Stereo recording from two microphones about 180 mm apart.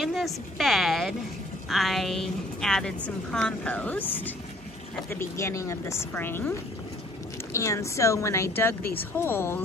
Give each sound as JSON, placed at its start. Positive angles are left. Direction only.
{"t": 0.0, "sound": "a woman's voice", "side_deg": 0}
{"t": 7.5, "sound": "a woman's voice", "side_deg": 15}